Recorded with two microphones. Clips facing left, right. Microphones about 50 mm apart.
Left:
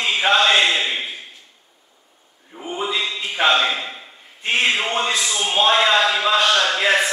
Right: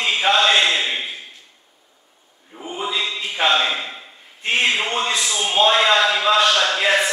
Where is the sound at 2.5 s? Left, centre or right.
Centre.